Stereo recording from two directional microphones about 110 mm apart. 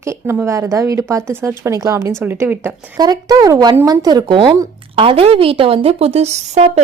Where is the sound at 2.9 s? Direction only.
35° right (ahead or behind).